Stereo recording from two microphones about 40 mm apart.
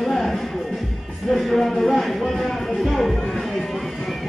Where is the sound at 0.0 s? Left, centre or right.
Centre.